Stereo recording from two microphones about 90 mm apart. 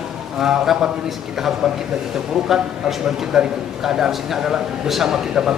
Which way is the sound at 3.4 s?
5° right (ahead or behind).